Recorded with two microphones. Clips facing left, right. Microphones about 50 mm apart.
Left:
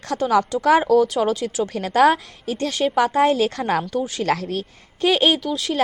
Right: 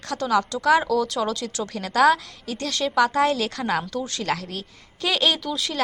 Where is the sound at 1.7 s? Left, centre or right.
Left.